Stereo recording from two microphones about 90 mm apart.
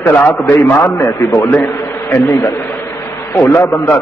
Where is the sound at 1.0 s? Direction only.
30° left (ahead or behind).